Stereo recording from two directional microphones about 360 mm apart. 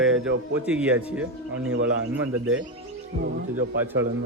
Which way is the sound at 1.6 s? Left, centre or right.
Right.